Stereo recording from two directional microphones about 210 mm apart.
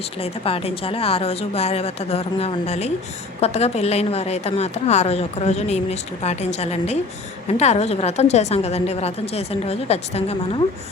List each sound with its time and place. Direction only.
0.2 s a woman's voice: 25° left (ahead or behind)